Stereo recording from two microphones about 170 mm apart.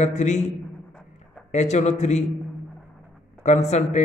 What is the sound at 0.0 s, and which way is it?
Speech, 45° left (ahead or behind).